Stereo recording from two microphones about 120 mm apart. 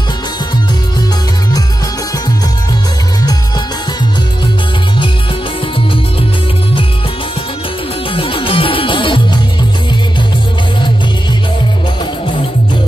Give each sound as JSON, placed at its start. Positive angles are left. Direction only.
{"t": 8.1, "sound": "music", "side_deg": 45}